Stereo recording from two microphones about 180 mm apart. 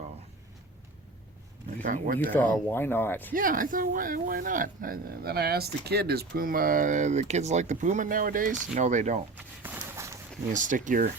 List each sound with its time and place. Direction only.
1.8 s speech: 50° right (ahead or behind)
2.3 s speech: 10° left (ahead or behind)
3.3 s speech: 50° right (ahead or behind)
9.6 s walk: 15° right (ahead or behind)
10.5 s speech: 45° right (ahead or behind)